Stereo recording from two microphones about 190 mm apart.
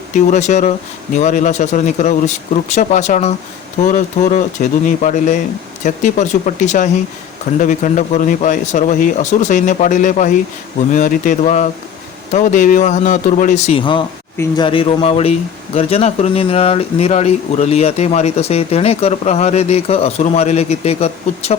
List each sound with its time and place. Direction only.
0.1 s speech: 40° left (ahead or behind)